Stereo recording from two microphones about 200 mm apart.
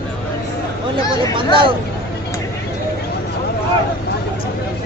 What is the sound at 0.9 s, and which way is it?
Speech, 25° right (ahead or behind).